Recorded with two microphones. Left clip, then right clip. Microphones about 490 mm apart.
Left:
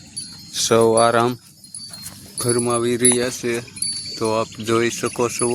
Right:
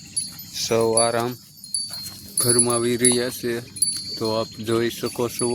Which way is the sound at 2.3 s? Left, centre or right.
Right.